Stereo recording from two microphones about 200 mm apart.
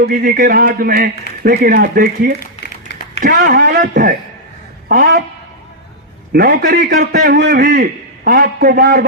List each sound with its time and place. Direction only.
0.0 s a man's voice: 45° right (ahead or behind)
2.4 s typing: 50° left (ahead or behind)
3.2 s a man's voice: 45° right (ahead or behind)
6.3 s a man's voice: 45° right (ahead or behind)
7.6 s a man's voice: 40° right (ahead or behind)